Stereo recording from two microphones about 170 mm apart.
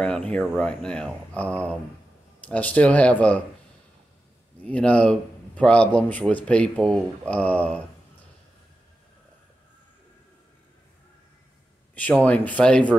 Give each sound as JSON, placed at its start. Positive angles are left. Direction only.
{"t": 0.0, "sound": "speech", "side_deg": 5}
{"t": 4.6, "sound": "speech", "side_deg": 10}
{"t": 11.9, "sound": "speech", "side_deg": 10}